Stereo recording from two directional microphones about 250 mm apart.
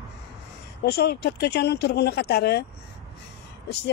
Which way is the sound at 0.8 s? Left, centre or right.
Left.